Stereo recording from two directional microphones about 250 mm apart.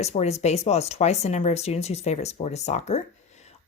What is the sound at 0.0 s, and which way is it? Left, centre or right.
Speech, left.